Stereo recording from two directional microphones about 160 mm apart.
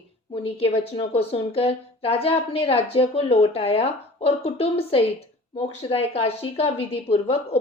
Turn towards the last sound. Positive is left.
turn(degrees=40)  # may be behind; listen again after turning